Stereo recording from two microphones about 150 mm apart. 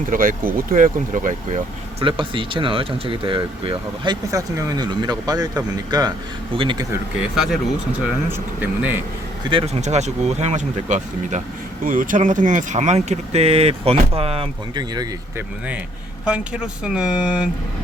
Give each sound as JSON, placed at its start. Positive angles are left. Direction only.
{"t": 0.1, "sound": "speech", "side_deg": -70}
{"t": 1.5, "sound": "speech", "side_deg": -35}
{"t": 7.3, "sound": "speech", "side_deg": 0}
{"t": 8.3, "sound": "speech", "side_deg": -10}
{"t": 9.5, "sound": "speech", "side_deg": -30}
{"t": 9.8, "sound": "speech", "side_deg": -50}
{"t": 15.4, "sound": "speech", "side_deg": -10}